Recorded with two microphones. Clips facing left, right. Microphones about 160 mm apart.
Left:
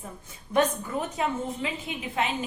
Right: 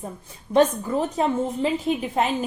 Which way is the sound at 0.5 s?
30° right (ahead or behind).